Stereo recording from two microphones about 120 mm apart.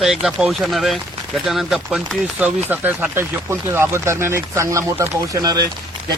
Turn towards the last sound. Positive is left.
turn(degrees=-35)  # may be behind; listen again after turning